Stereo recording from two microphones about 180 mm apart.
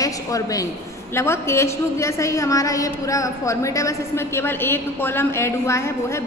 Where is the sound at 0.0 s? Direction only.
20° left (ahead or behind).